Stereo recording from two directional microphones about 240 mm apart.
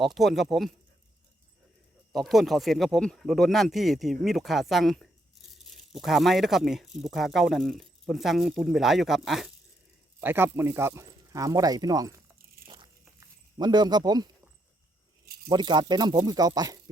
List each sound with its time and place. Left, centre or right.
0.0 s speech: centre
2.1 s speech: centre
12.6 s a sound: right
15.4 s speech: centre